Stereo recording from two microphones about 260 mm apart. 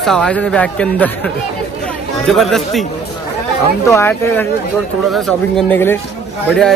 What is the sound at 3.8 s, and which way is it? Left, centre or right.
Speech, centre.